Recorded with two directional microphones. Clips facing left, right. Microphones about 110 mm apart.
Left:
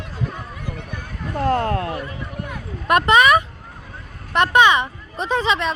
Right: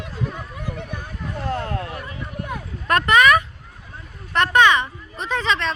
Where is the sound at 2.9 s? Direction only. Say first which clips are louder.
Left 1 dB; 20° left (ahead or behind).